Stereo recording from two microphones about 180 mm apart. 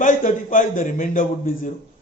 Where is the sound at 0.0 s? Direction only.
45° left (ahead or behind).